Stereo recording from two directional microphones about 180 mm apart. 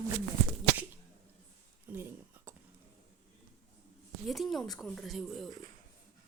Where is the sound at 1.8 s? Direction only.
10° right (ahead or behind).